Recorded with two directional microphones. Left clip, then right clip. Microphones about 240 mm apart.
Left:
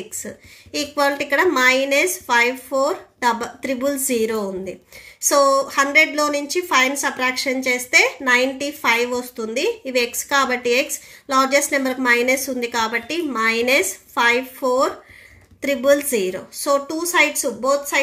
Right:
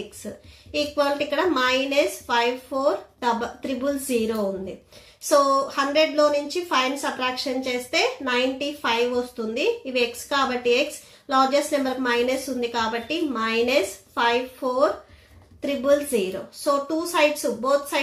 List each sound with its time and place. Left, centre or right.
0.7 s a woman's voice: left